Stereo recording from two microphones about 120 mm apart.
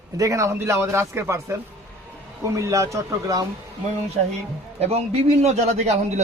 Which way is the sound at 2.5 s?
25° right (ahead or behind).